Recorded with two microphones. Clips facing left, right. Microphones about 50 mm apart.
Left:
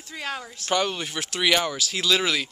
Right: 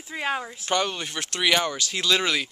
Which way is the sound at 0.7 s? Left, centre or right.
Centre.